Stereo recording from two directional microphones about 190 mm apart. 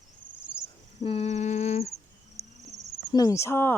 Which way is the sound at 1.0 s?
35° left (ahead or behind).